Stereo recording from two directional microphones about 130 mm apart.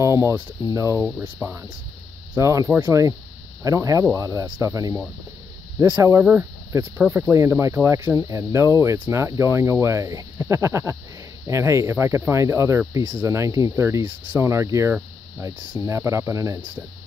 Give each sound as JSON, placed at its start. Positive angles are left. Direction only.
{"t": 0.0, "sound": "speech", "side_deg": -20}